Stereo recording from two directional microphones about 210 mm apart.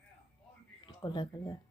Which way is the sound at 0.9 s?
20° left (ahead or behind).